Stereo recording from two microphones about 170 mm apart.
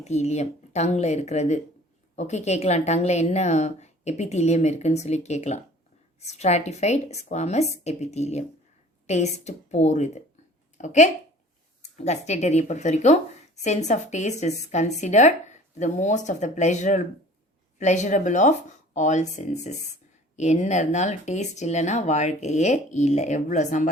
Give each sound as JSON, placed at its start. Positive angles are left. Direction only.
{"t": 0.0, "sound": "a woman's voice", "side_deg": 40}